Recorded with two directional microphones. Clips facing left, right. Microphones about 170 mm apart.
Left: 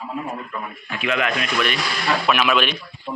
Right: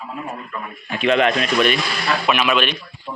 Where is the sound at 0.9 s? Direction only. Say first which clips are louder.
Right 6 dB; 30° right (ahead or behind).